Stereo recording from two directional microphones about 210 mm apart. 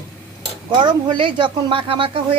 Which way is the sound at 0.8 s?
25° right (ahead or behind).